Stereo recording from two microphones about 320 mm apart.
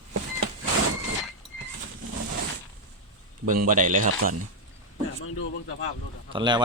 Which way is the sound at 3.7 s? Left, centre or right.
Right.